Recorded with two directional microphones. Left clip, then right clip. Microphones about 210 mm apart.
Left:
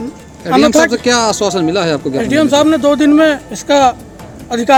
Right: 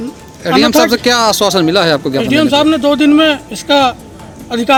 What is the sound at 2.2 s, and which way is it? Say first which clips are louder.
Speech: left 3 dB; 10° left (ahead or behind).